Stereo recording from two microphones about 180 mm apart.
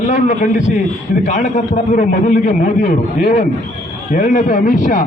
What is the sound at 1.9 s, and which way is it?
A man's voice, 45° left (ahead or behind).